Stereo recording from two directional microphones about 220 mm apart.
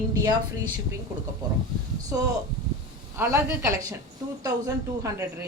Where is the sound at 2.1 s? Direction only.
15° right (ahead or behind).